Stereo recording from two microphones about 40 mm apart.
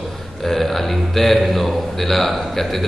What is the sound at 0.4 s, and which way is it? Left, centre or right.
A man's voice, centre.